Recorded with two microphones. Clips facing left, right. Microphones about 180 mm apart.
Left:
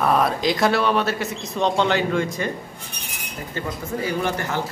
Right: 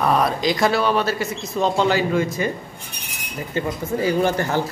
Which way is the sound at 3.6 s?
20° right (ahead or behind).